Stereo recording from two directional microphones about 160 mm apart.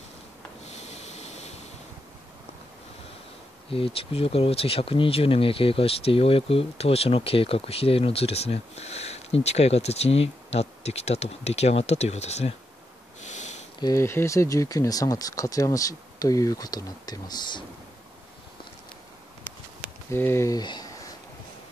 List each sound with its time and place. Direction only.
0.7 s a sound: 45° left (ahead or behind)
3.7 s speech: 35° left (ahead or behind)
13.7 s speech: 20° left (ahead or behind)
20.1 s speech: 15° left (ahead or behind)